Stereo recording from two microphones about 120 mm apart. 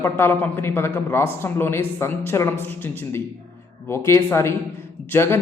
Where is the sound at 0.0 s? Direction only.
20° left (ahead or behind).